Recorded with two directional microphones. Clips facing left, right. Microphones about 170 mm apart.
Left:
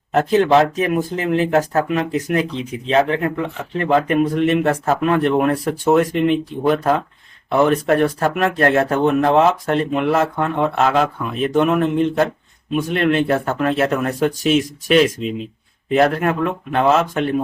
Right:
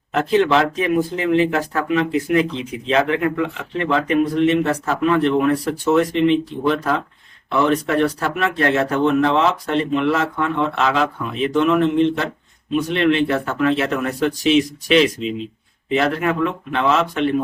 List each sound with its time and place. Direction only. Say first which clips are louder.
0.1 s speech: left 2 dB; 45° left (ahead or behind)
7.6 s speech: left 2 dB; 50° left (ahead or behind)